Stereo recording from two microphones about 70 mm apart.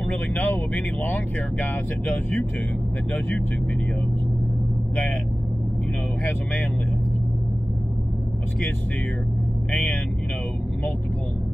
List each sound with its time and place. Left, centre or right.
0.4 s speech: left